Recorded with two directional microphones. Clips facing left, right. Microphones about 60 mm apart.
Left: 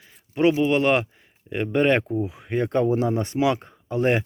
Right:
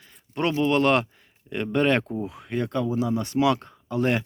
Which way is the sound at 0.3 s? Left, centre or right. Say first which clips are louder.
Left 3 dB; centre.